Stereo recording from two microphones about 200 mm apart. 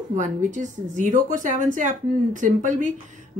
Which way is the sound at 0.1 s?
40° right (ahead or behind).